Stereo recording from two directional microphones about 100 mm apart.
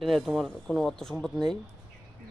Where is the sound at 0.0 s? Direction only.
Centre (ahead or behind).